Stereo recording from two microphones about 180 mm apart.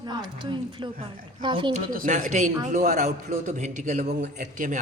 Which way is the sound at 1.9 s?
50° right (ahead or behind).